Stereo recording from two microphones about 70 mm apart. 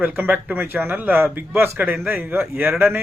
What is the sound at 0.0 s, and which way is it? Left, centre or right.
A man's voice, right.